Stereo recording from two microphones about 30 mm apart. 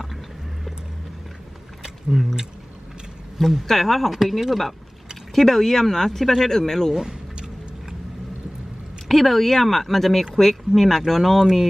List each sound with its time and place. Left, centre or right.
3.3 s speech: centre
5.3 s speech: centre
7.1 s vehicle: right
9.0 s speech: centre